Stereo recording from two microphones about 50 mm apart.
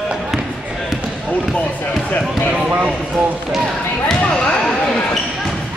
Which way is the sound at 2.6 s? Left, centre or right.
Right.